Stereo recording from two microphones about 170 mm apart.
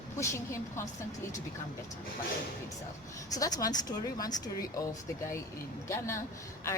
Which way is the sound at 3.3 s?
20° left (ahead or behind).